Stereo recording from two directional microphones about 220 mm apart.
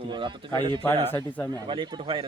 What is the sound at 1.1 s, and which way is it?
Speech, 10° left (ahead or behind).